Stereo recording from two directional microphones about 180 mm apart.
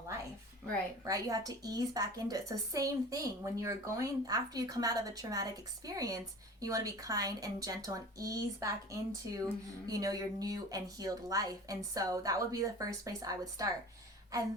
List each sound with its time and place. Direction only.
1.0 s a woman's voice: 20° right (ahead or behind)